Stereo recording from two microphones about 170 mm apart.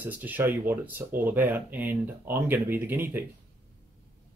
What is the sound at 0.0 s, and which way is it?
Speech, 10° right (ahead or behind).